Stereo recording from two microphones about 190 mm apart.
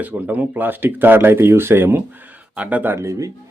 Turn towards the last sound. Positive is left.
turn(degrees=-15)  # may be behind; listen again after turning